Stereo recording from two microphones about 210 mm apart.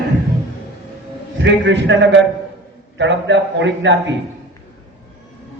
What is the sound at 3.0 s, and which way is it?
A man's voice, 60° right (ahead or behind).